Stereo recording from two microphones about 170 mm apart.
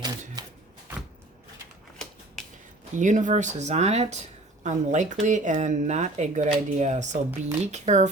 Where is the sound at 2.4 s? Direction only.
5° left (ahead or behind).